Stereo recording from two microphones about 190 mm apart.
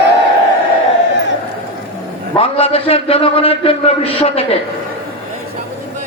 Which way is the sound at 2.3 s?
30° left (ahead or behind).